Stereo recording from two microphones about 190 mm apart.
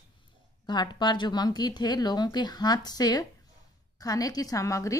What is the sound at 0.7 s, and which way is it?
A woman's voice, 25° left (ahead or behind).